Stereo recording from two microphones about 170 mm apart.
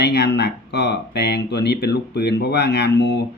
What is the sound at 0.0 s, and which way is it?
Speech, 75° left (ahead or behind).